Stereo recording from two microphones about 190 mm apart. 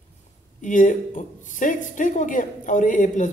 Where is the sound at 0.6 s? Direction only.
40° left (ahead or behind).